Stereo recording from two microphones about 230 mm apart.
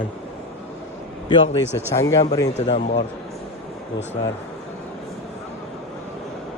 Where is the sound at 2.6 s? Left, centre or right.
Left.